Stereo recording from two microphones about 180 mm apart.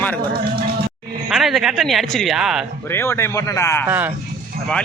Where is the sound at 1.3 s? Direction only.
Centre (ahead or behind).